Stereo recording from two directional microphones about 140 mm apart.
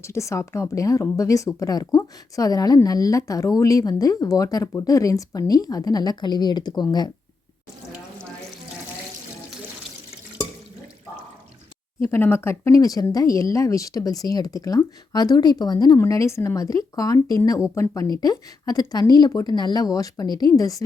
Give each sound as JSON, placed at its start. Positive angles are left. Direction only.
{"t": 0.0, "sound": "a woman's voice", "side_deg": 20}
{"t": 12.0, "sound": "a woman's voice", "side_deg": 15}